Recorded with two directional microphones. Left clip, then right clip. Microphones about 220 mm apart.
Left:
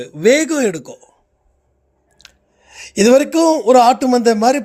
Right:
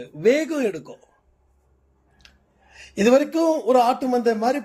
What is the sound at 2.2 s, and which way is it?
Chewing, 45° left (ahead or behind).